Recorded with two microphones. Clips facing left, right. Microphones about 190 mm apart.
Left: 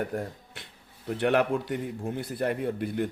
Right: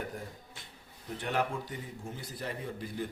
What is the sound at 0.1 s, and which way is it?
Speech, 60° left (ahead or behind).